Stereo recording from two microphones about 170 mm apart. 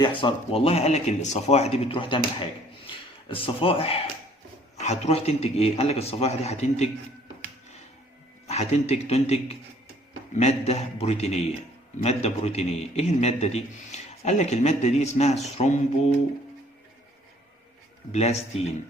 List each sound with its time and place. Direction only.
0.0 s a man's voice: 30° left (ahead or behind)
8.4 s a man's voice: 40° left (ahead or behind)
18.1 s a man's voice: 40° left (ahead or behind)